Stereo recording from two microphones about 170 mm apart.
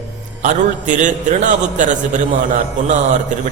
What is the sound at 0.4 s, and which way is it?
A man's voice, 45° right (ahead or behind).